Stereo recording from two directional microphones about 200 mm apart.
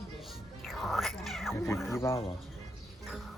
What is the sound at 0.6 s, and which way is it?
Cat, centre (ahead or behind).